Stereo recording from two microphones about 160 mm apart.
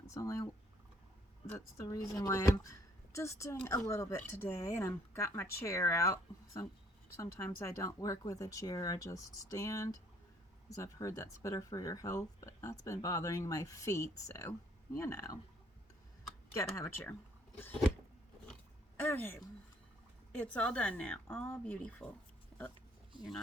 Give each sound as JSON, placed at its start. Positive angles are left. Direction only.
{"t": 0.1, "sound": "a woman's voice", "side_deg": 20}
{"t": 16.6, "sound": "a woman's voice", "side_deg": 20}
{"t": 18.9, "sound": "a woman's voice", "side_deg": 10}